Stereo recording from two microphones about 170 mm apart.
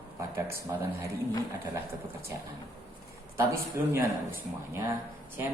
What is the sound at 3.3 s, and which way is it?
Speech, 15° right (ahead or behind).